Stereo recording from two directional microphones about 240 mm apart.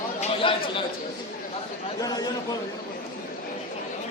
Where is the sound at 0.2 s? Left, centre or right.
Left.